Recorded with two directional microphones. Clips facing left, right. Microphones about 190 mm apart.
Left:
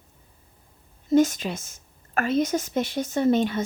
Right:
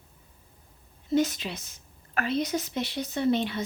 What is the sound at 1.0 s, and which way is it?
Speech, 45° left (ahead or behind).